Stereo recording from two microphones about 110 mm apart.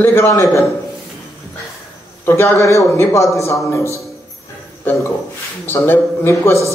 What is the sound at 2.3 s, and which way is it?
A man's voice, 20° left (ahead or behind).